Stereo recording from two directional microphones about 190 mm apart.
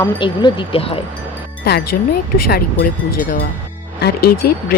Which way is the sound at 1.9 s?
50° left (ahead or behind).